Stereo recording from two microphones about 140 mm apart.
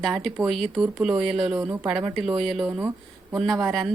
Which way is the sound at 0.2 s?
Centre (ahead or behind).